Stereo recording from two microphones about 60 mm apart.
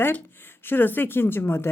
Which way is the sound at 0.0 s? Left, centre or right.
Left.